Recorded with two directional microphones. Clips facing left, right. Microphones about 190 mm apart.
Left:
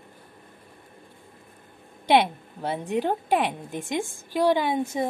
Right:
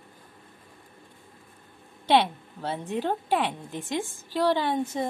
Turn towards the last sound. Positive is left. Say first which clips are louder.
# left 2 dB
turn(degrees=10)  # may be behind; listen again after turning